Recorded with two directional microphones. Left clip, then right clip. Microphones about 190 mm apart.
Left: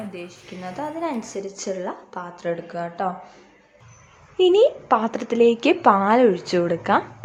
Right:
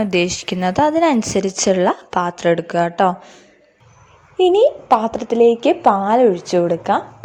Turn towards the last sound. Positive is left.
turn(degrees=-10)  # may be behind; listen again after turning